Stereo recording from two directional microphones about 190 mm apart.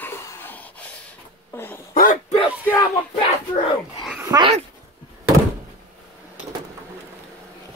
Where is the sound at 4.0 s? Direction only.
5° right (ahead or behind).